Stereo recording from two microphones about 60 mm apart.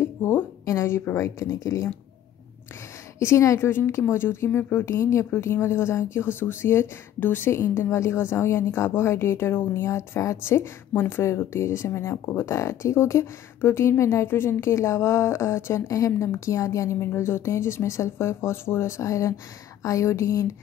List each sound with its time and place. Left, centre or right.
0.2 s a woman's voice: left
0.7 s a woman's voice: left
3.2 s a woman's voice: left
4.9 s a woman's voice: left
5.3 s a woman's voice: left
12.5 s a woman's voice: left
14.7 s a woman's voice: left